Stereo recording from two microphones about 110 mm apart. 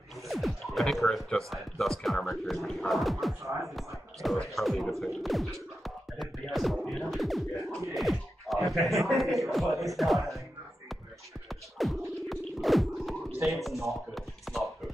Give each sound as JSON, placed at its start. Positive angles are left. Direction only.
{"t": 0.3, "sound": "speech", "side_deg": 0}
{"t": 5.0, "sound": "music", "side_deg": 0}
{"t": 7.9, "sound": "speech", "side_deg": 0}
{"t": 11.4, "sound": "music", "side_deg": 0}
{"t": 13.4, "sound": "speech", "side_deg": 0}
{"t": 13.8, "sound": "chopping", "side_deg": 0}